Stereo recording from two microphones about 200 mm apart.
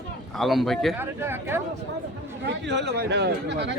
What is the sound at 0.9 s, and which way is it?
Speech, 10° right (ahead or behind).